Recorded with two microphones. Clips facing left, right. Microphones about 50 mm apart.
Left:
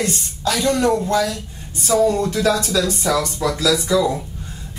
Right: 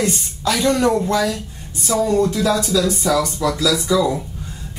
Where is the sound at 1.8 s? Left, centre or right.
Centre.